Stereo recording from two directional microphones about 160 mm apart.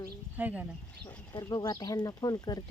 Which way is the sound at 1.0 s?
25° left (ahead or behind).